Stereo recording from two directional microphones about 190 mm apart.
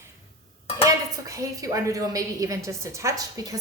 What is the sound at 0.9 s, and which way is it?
A woman's voice, 15° right (ahead or behind).